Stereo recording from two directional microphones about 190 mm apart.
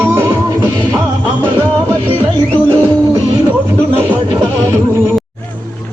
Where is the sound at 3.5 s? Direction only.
10° right (ahead or behind).